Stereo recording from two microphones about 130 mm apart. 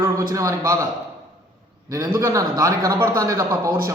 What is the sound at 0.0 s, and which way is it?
Speech, 25° right (ahead or behind).